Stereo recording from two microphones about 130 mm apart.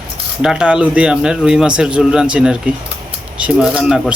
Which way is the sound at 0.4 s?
5° right (ahead or behind).